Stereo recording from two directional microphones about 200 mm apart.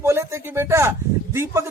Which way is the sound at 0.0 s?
10° right (ahead or behind).